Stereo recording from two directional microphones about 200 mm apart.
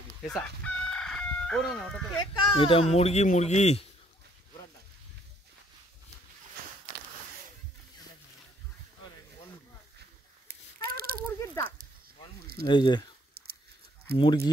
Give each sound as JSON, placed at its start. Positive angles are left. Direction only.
{"t": 0.3, "sound": "chicken", "side_deg": 5}
{"t": 2.5, "sound": "speech", "side_deg": 25}
{"t": 10.5, "sound": "a sound", "side_deg": -45}
{"t": 11.3, "sound": "a sound", "side_deg": 15}
{"t": 12.6, "sound": "speech", "side_deg": 25}
{"t": 14.1, "sound": "speech", "side_deg": 25}